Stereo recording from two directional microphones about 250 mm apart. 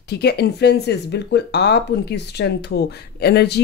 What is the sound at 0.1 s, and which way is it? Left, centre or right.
Speech, left.